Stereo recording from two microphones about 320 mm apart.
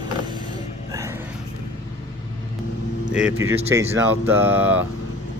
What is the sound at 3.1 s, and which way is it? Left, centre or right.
Speech, centre.